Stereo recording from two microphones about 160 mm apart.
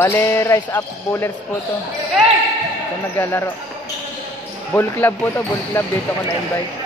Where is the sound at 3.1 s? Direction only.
15° left (ahead or behind).